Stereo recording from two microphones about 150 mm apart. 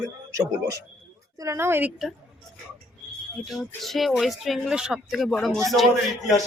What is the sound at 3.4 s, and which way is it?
Speech, centre (ahead or behind).